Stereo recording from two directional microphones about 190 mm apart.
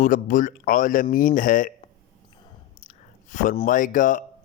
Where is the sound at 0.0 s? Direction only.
45° left (ahead or behind).